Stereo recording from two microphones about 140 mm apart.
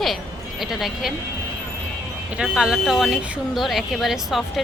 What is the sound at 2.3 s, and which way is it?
Speech, 5° right (ahead or behind).